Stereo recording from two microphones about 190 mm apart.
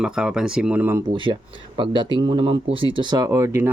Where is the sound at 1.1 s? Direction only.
25° right (ahead or behind).